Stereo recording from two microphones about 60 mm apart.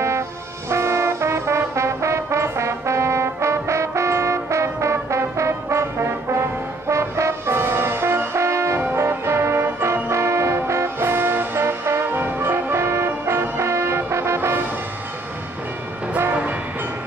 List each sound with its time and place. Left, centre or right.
0.7 s music: right
6.9 s brass instrument: right
12.8 s music: right